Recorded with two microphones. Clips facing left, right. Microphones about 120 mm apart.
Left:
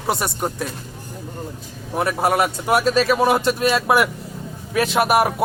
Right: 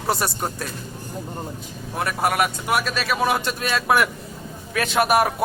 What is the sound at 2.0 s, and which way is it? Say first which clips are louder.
Speech: left 3 dB; 20° left (ahead or behind).